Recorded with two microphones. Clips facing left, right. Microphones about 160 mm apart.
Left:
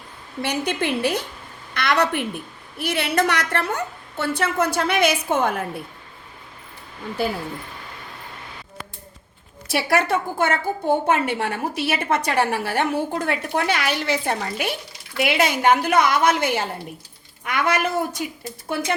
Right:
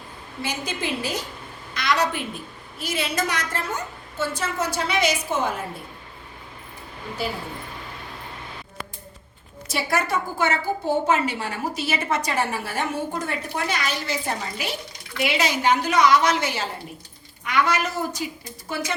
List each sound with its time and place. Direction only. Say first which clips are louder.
0.4 s a woman's voice: left 5 dB; 65° left (ahead or behind)
9.7 s a woman's voice: left 4 dB; 60° left (ahead or behind)